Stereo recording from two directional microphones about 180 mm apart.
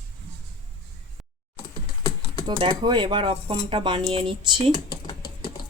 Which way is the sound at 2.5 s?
25° right (ahead or behind).